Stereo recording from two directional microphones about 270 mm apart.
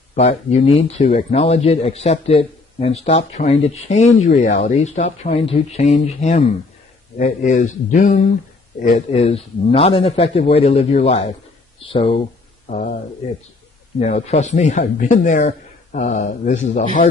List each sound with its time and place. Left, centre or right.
0.1 s speech: left
13.9 s speech: left